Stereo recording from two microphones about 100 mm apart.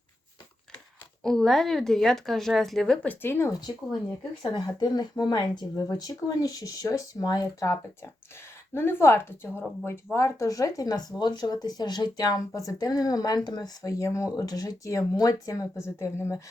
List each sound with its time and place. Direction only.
1.2 s speech: 5° left (ahead or behind)
3.1 s speech: 20° left (ahead or behind)
4.5 s a woman's voice: 45° left (ahead or behind)
13.8 s a woman's voice: 30° left (ahead or behind)